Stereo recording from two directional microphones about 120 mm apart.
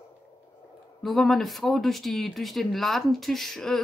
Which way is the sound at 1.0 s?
Centre (ahead or behind).